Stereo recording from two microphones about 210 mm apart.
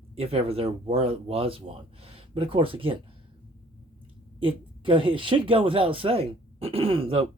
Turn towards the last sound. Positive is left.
turn(degrees=-25)  # may be behind; listen again after turning